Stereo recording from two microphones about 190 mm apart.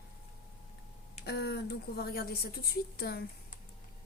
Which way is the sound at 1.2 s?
60° left (ahead or behind).